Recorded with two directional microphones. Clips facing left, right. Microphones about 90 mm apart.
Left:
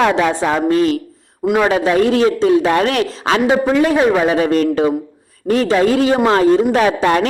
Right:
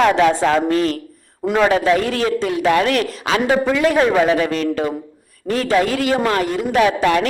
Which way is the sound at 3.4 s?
15° left (ahead or behind).